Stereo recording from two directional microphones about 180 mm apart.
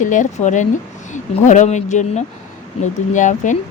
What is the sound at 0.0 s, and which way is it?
Speech, 45° left (ahead or behind).